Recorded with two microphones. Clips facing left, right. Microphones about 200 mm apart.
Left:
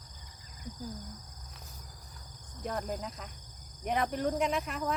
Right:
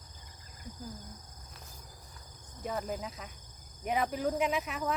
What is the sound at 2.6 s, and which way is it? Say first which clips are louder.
Speech: even; 5° right (ahead or behind).